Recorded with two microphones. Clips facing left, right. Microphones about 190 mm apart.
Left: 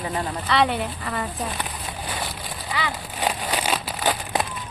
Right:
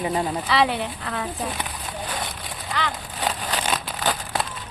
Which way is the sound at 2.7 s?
10° left (ahead or behind).